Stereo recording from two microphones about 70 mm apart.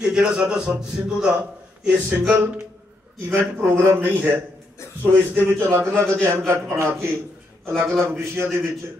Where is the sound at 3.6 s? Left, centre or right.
Right.